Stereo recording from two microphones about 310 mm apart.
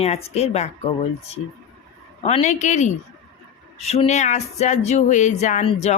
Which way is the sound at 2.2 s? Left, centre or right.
Left.